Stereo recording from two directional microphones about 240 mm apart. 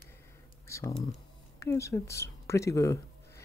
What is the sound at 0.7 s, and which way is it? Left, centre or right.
Speech, centre.